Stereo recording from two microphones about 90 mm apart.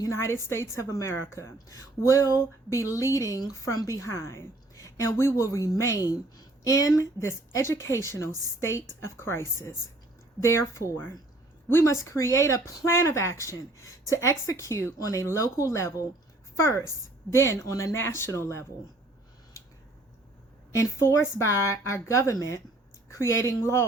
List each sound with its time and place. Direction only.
0.0 s a woman's voice: 30° left (ahead or behind)
20.7 s a woman's voice: 30° left (ahead or behind)